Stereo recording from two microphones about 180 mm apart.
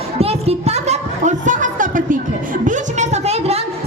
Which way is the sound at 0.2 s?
35° right (ahead or behind).